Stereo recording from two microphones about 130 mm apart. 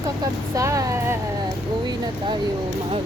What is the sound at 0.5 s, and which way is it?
Vehicle, 25° right (ahead or behind).